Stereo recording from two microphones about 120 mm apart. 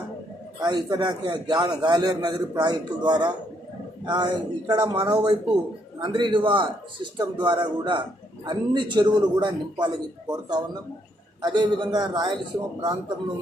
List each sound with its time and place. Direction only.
0.6 s a man's voice: 35° right (ahead or behind)
6.0 s a man's voice: 45° right (ahead or behind)